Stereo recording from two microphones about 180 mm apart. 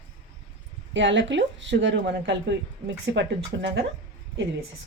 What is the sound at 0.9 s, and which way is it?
Speech, 90° right.